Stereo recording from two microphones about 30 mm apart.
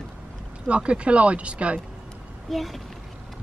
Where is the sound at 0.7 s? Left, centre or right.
Right.